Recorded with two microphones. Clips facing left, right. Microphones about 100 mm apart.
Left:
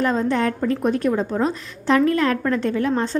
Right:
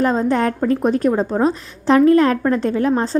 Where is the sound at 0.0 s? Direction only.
35° right (ahead or behind).